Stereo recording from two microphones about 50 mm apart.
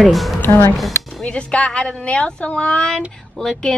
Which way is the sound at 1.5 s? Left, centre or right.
Left.